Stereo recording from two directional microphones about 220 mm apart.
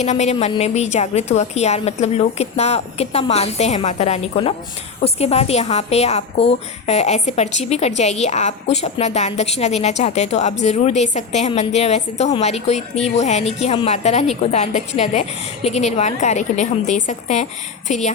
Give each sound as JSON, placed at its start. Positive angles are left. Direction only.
{"t": 0.0, "sound": "a woman's voice", "side_deg": 30}